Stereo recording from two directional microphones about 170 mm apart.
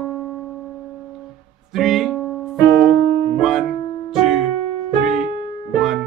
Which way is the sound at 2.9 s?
75° right (ahead or behind).